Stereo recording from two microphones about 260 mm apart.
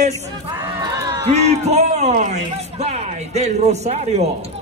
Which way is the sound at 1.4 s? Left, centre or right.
Right.